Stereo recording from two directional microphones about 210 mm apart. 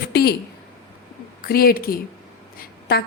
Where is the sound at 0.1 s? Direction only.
50° left (ahead or behind).